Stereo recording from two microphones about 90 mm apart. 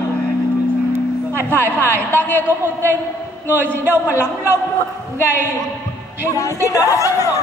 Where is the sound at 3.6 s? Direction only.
25° right (ahead or behind).